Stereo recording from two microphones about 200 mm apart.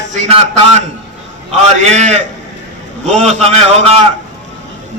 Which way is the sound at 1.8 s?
35° right (ahead or behind).